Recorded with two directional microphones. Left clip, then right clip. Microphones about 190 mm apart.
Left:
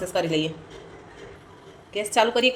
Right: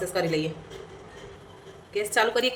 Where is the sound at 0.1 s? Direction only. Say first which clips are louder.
Left 4 dB; 15° left (ahead or behind).